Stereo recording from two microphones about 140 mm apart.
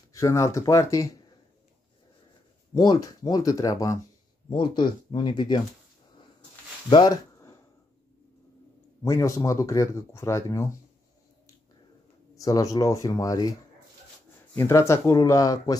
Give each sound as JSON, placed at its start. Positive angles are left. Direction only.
{"t": 0.1, "sound": "speech", "side_deg": 20}
{"t": 2.7, "sound": "speech", "side_deg": 30}
{"t": 4.5, "sound": "speech", "side_deg": 35}
{"t": 6.9, "sound": "speech", "side_deg": 35}
{"t": 9.0, "sound": "speech", "side_deg": 20}
{"t": 12.4, "sound": "speech", "side_deg": 25}